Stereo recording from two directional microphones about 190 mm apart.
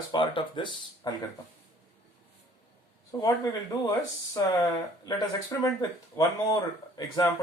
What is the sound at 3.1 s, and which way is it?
Speech, 20° left (ahead or behind).